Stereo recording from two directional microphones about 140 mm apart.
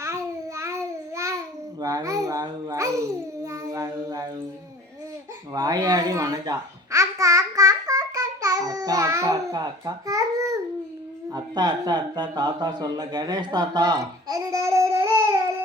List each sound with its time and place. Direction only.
0.0 s babbling: 20° right (ahead or behind)
1.8 s speech: 25° right (ahead or behind)
3.4 s a sound: 25° right (ahead or behind)
5.5 s a child's voice: 30° right (ahead or behind)
14.3 s babbling: 25° right (ahead or behind)